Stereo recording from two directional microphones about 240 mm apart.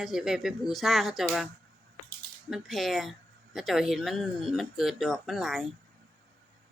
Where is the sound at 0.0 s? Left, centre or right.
Centre.